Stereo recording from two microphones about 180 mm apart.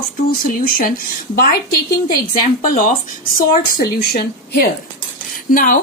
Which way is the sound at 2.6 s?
50° left (ahead or behind).